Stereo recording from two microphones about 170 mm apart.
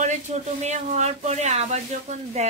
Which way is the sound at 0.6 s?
40° right (ahead or behind).